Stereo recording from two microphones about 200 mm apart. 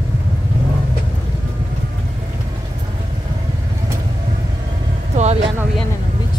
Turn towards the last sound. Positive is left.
turn(degrees=-35)  # may be behind; listen again after turning